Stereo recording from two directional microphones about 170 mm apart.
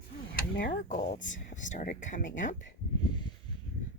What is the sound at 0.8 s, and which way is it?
Speech, 45° left (ahead or behind).